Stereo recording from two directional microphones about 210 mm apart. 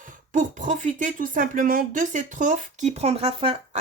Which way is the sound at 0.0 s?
40° right (ahead or behind).